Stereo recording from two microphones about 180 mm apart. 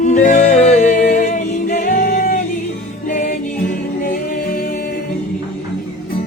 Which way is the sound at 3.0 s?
45° left (ahead or behind).